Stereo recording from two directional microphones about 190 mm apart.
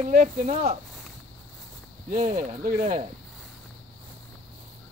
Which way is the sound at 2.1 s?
45° right (ahead or behind).